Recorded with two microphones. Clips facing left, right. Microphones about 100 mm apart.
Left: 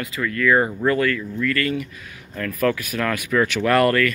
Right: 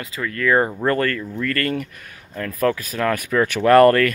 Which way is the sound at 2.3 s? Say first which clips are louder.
Right 1 dB; 30° right (ahead or behind).